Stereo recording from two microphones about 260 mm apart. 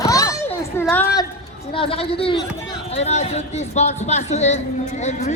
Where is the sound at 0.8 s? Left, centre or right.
Centre.